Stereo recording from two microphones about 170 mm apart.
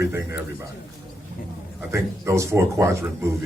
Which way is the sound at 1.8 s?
15° right (ahead or behind).